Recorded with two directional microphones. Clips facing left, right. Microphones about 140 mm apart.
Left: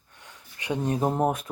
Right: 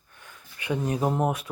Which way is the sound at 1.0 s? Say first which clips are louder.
Left 1 dB; 35° left (ahead or behind).